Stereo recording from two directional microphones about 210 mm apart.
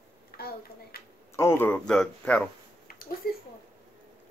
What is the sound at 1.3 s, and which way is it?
Speech, 10° left (ahead or behind).